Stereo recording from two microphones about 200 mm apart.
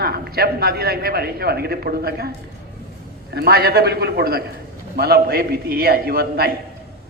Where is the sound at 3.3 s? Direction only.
50° right (ahead or behind).